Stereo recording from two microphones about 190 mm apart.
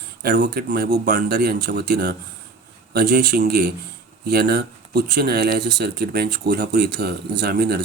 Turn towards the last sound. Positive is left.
turn(degrees=-55)  # may be behind; listen again after turning